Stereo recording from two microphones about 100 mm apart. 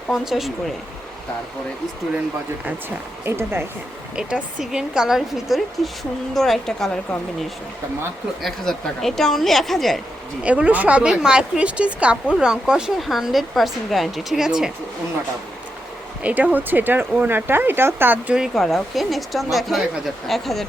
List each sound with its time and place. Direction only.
0.1 s a woman's voice: centre (ahead or behind)
3.2 s speech: 25° right (ahead or behind)
4.1 s a woman's voice: 10° right (ahead or behind)
8.4 s a woman's voice: centre (ahead or behind)
10.4 s speech: 15° right (ahead or behind)
16.2 s speech: 15° right (ahead or behind)
18.3 s a woman's voice: centre (ahead or behind)